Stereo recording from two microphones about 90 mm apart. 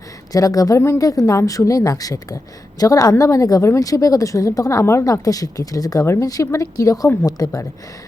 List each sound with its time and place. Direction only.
0.3 s a woman's voice: 40° left (ahead or behind)